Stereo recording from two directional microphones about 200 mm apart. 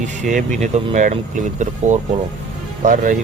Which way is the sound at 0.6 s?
35° right (ahead or behind).